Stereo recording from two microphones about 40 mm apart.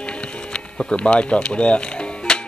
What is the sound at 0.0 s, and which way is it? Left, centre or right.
Music, left.